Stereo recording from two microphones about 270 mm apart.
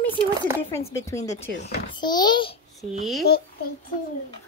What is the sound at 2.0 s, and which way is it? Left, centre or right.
Speech, centre.